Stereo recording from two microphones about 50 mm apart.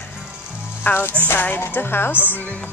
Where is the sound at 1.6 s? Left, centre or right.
Left.